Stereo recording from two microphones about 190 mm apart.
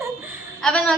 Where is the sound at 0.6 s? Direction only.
5° left (ahead or behind).